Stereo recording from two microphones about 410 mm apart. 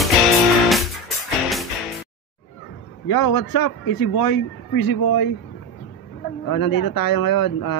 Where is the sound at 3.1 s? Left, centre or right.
Left.